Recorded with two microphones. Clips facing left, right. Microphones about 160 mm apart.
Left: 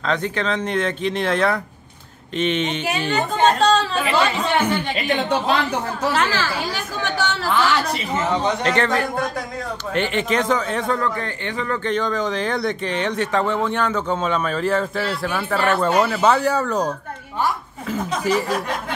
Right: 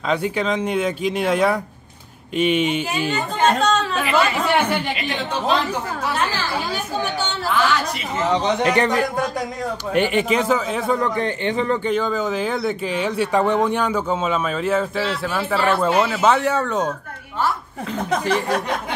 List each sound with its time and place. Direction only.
0.0 s speech: 10° right (ahead or behind)
3.4 s chatter: 35° left (ahead or behind)
4.5 s speech: 10° right (ahead or behind)
6.1 s a woman's voice: 90° left
8.3 s speech: 20° right (ahead or behind)
11.0 s a man's voice: 20° right (ahead or behind)
11.8 s speech: 5° right (ahead or behind)